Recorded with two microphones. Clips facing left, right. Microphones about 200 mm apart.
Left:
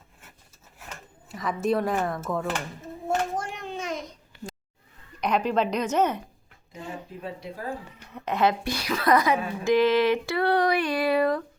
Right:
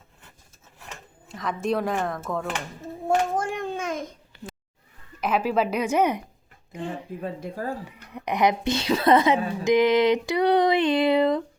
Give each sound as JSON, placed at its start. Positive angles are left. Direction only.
{"t": 0.9, "sound": "speech", "side_deg": 5}
{"t": 3.3, "sound": "babbling", "side_deg": -50}
{"t": 5.2, "sound": "speech", "side_deg": -5}
{"t": 6.7, "sound": "speech", "side_deg": -30}
{"t": 7.3, "sound": "speech", "side_deg": -45}
{"t": 7.9, "sound": "a woman's voice", "side_deg": -15}